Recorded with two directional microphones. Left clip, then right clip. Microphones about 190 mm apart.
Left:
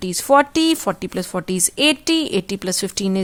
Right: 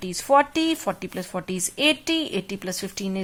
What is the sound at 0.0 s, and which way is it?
A woman's voice, 50° left (ahead or behind).